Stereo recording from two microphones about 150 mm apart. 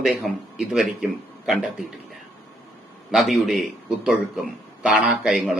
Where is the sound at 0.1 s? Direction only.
5° right (ahead or behind).